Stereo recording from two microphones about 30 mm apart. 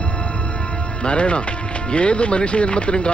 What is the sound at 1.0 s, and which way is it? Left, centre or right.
Speech, left.